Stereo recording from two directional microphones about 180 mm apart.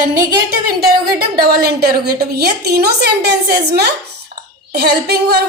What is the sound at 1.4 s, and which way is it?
A woman's voice, 60° right (ahead or behind).